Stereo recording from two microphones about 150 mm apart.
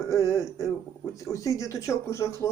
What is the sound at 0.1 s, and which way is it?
Speech, 20° left (ahead or behind).